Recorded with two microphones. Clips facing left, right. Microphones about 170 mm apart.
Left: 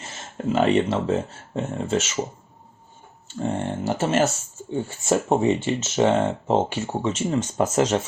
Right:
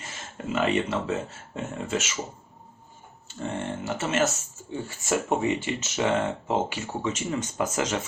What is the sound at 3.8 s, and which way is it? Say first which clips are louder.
Speech: left 5 dB; 35° left (ahead or behind).